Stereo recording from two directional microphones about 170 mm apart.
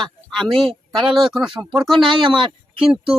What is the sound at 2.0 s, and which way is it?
Speech, 30° right (ahead or behind).